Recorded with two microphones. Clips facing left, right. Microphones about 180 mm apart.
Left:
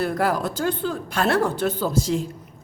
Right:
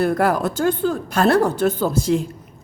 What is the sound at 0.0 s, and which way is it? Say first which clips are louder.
A woman's voice: right 4 dB; 55° right (ahead or behind).